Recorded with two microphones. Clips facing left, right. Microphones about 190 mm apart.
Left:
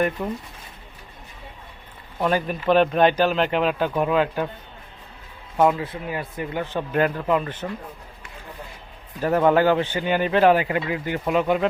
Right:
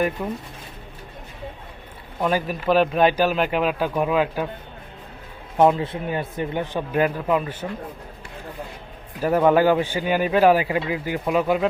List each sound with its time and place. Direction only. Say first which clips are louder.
0.2 s speech: even; centre (ahead or behind)
2.1 s speech: even; 5° right (ahead or behind)
5.5 s speech: right 2 dB; 25° right (ahead or behind)
6.7 s speech: even; 10° right (ahead or behind)
9.2 s speech: right 1 dB; 10° right (ahead or behind)
11.3 s speech: even; 5° right (ahead or behind)